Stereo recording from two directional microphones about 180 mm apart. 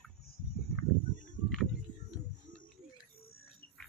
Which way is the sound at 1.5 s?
Centre (ahead or behind).